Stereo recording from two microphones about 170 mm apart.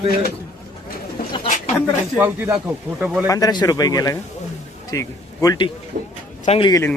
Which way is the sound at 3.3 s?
20° left (ahead or behind).